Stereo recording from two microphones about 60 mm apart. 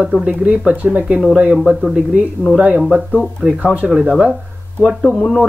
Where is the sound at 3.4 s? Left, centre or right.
Right.